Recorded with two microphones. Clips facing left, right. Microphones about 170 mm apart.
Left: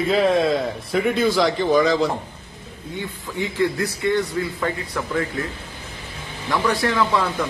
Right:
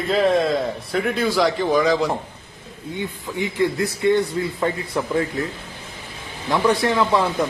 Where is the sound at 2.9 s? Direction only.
20° right (ahead or behind).